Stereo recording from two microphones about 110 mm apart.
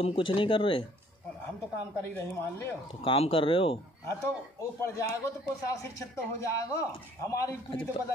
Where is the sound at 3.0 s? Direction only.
55° left (ahead or behind).